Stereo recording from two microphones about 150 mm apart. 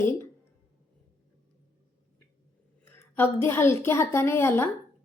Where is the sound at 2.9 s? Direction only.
15° left (ahead or behind).